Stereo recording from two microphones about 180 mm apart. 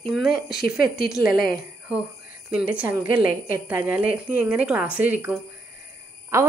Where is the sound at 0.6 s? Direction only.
55° left (ahead or behind).